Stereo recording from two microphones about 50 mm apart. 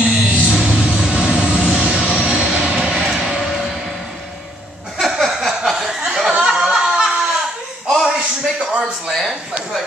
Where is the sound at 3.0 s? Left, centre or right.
Centre.